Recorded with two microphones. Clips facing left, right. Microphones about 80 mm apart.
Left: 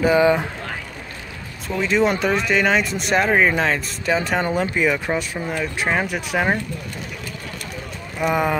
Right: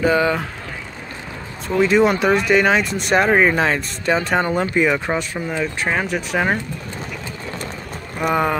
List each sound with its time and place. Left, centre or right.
0.0 s speech: centre
1.8 s speech: centre
8.2 s speech: centre